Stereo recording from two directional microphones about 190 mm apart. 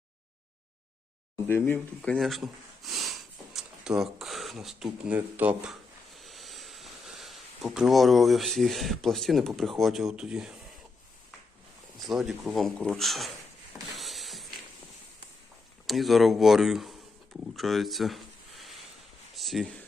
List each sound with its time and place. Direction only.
1.5 s speech: 10° left (ahead or behind)
11.9 s speech: centre (ahead or behind)
13.9 s music: centre (ahead or behind)
15.9 s speech: centre (ahead or behind)
17.6 s a sound: centre (ahead or behind)
19.3 s speech: centre (ahead or behind)